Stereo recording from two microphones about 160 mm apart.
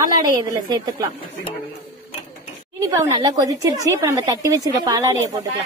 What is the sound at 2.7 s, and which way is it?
A woman's voice, 25° right (ahead or behind).